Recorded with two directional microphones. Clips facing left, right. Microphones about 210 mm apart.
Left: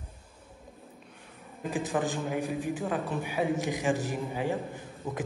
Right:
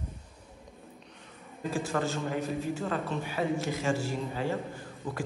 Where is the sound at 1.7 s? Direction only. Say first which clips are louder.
Left 1 dB; 15° left (ahead or behind).